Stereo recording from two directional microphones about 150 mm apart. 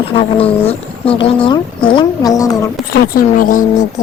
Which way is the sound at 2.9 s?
70° left (ahead or behind).